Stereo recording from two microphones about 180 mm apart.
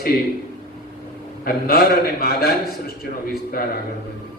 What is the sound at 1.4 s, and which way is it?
A man's voice, 55° left (ahead or behind).